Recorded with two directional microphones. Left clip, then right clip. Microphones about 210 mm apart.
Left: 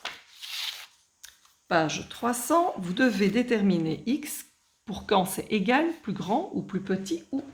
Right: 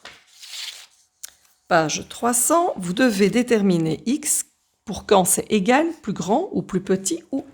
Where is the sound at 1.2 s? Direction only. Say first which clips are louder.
Right 8 dB; 50° right (ahead or behind).